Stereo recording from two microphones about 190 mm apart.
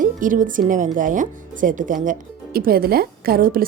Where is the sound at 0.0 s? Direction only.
45° right (ahead or behind).